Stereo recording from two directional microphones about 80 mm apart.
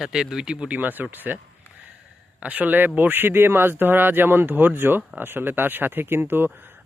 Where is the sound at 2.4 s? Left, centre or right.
Centre.